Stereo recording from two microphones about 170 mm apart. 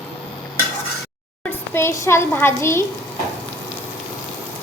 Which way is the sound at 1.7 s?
15° left (ahead or behind).